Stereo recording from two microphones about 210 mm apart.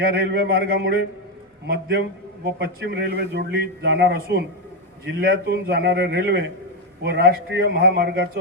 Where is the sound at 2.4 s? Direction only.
45° right (ahead or behind).